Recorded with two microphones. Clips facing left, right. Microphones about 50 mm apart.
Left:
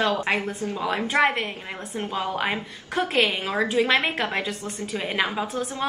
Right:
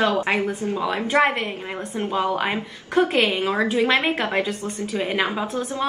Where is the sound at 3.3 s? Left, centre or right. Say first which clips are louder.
Right 4 dB; right.